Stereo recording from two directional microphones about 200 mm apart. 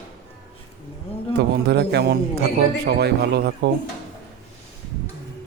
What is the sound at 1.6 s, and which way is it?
Speech, 55° right (ahead or behind).